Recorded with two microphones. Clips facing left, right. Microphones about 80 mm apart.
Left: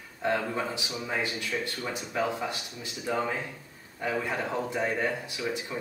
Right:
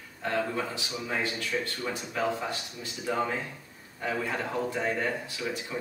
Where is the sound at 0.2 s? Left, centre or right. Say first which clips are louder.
Left 1 dB; centre.